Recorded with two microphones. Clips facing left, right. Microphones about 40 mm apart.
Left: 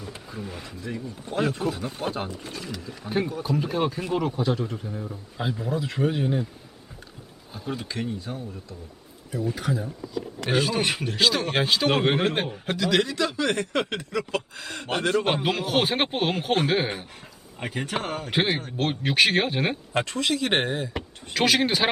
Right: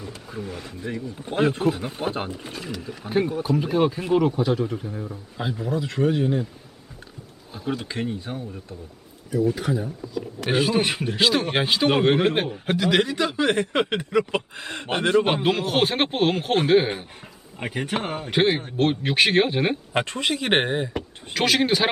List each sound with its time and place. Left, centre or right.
0.3 s a man's voice: centre
1.2 s a man's voice: right; by 6.5 s centre
7.5 s speech: centre
7.9 s speech: right
9.6 s a man's voice: centre
12.6 s speech: centre
15.3 s a man's voice: centre
18.3 s a man's voice: centre
19.9 s speech: right
21.3 s a man's voice: centre